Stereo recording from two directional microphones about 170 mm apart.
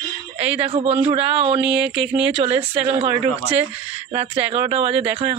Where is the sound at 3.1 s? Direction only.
20° right (ahead or behind).